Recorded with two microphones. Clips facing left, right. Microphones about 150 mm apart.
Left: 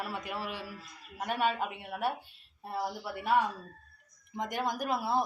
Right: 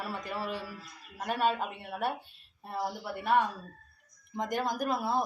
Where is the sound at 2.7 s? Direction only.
5° left (ahead or behind).